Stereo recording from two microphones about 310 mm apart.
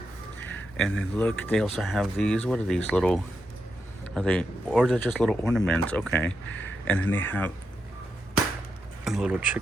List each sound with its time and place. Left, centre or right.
0.5 s speech: centre
9.0 s speech: centre